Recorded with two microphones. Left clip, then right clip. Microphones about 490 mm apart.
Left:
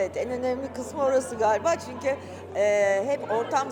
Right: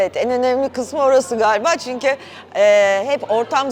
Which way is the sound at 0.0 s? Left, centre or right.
Right.